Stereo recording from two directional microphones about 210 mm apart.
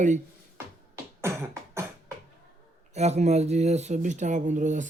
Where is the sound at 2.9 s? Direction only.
30° right (ahead or behind).